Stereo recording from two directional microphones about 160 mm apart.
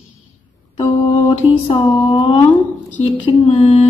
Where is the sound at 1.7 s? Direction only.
30° left (ahead or behind).